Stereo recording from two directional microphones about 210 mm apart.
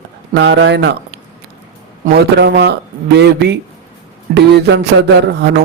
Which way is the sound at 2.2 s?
55° right (ahead or behind).